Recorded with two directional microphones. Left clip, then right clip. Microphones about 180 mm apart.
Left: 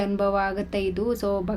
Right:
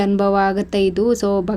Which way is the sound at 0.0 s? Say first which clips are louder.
Right 7 dB; 40° right (ahead or behind).